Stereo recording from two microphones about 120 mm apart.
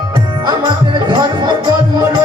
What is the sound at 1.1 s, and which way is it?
Music, 40° right (ahead or behind).